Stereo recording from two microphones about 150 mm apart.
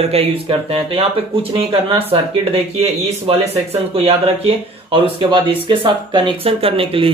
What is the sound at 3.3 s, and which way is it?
Speech, 40° right (ahead or behind).